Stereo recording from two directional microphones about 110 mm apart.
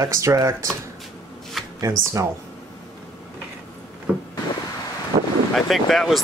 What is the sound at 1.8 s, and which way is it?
Speech, 30° right (ahead or behind).